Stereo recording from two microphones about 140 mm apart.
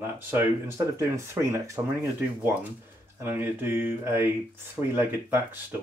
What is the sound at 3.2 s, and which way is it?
Speech, 15° right (ahead or behind).